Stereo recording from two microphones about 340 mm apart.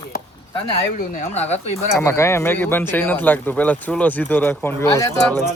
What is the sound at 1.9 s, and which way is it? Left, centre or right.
Speech, centre.